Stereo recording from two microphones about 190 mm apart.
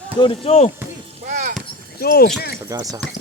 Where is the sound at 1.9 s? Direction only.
55° left (ahead or behind).